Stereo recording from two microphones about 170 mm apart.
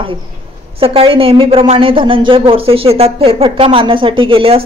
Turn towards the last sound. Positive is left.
turn(degrees=-30)  # may be behind; listen again after turning